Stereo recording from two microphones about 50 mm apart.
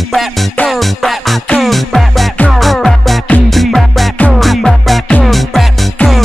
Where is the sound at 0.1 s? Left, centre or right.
Centre.